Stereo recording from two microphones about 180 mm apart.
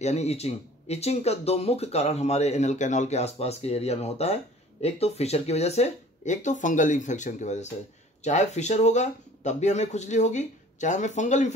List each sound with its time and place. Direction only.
0.0 s speech: 40° left (ahead or behind)